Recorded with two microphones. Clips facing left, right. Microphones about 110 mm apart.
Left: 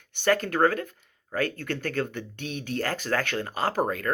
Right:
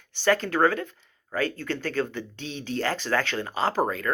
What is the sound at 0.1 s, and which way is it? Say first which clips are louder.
Speech: right 1 dB; 50° left (ahead or behind).